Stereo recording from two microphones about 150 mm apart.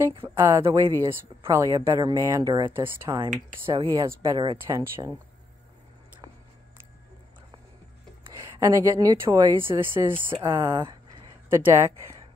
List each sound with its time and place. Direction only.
0.2 s speech: 15° right (ahead or behind)
2.7 s speech: 15° right (ahead or behind)
3.7 s speech: 30° right (ahead or behind)
4.6 s speech: 15° right (ahead or behind)
8.3 s speech: 20° right (ahead or behind)
10.3 s speech: 25° right (ahead or behind)